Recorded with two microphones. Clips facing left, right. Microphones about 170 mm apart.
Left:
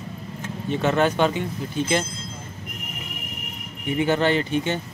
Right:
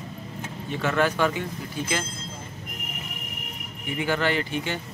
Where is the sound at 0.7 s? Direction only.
20° left (ahead or behind).